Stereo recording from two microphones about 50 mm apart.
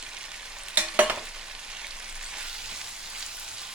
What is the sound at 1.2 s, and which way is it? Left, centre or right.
Frying, centre.